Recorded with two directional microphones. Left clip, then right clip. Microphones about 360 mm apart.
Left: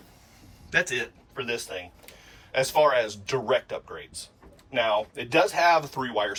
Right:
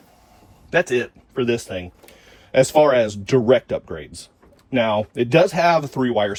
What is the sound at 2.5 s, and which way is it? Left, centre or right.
Speech, centre.